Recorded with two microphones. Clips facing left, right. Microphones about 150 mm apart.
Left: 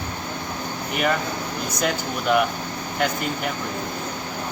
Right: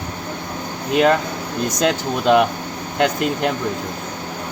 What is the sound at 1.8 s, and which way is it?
Speech, 90° right.